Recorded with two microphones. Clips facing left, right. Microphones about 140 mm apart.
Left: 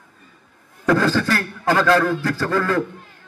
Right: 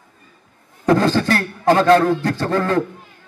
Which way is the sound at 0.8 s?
25° right (ahead or behind).